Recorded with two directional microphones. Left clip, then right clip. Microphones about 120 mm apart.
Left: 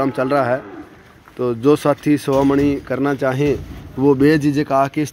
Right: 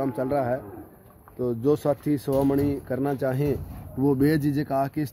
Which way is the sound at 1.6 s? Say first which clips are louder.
Left 9 dB; centre (ahead or behind).